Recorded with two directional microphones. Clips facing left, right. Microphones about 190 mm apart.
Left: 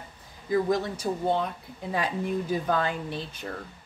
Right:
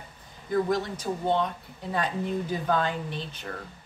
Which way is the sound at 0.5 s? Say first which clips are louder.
Left 1 dB; 10° left (ahead or behind).